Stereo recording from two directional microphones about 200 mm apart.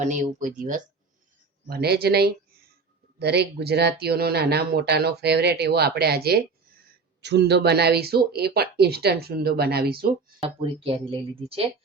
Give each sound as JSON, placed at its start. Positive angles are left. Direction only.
{"t": 0.0, "sound": "speech", "side_deg": -40}
{"t": 10.6, "sound": "speech", "side_deg": -25}